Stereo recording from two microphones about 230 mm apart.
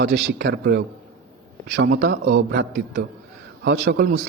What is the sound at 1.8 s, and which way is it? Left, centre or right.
Speech, right.